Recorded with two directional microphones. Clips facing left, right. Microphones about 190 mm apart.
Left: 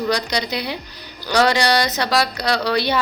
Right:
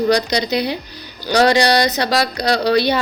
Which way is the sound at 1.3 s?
35° right (ahead or behind).